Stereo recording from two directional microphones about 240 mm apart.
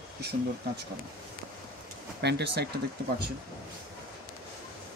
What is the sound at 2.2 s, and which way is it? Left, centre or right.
Speech, right.